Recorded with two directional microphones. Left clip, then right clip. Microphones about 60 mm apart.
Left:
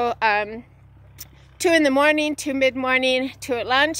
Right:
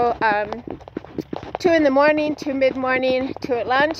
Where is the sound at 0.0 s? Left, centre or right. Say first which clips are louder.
Right 2 dB; left.